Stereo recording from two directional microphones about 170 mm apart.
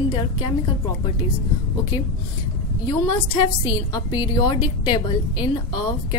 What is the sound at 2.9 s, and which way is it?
A woman's voice, 30° left (ahead or behind).